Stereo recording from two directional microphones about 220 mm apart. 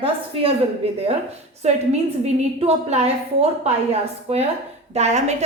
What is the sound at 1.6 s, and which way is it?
A woman's voice, 30° right (ahead or behind).